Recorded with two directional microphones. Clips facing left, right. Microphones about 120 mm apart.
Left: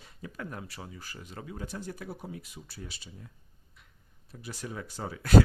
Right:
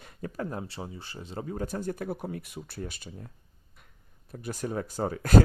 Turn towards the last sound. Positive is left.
turn(degrees=-45)  # may be behind; listen again after turning